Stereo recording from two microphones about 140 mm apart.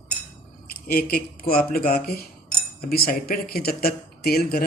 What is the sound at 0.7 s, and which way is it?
Speech, 90° left.